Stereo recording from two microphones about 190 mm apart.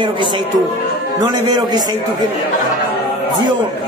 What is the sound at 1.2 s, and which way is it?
Speech, 20° right (ahead or behind).